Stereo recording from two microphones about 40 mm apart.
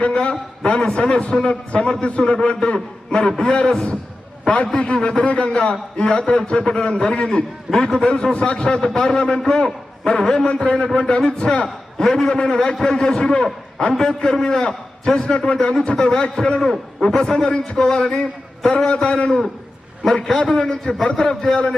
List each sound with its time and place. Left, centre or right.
0.1 s a man's voice: left
11.9 s a man's voice: centre
20.3 s a man's voice: centre